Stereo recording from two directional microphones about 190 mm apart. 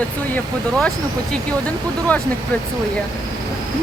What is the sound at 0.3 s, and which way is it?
Speech, 5° left (ahead or behind).